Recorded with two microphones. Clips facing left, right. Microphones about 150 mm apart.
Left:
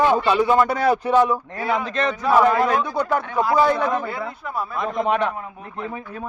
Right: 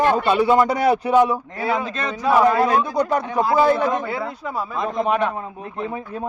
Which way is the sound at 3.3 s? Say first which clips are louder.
Right 1 dB; 20° right (ahead or behind).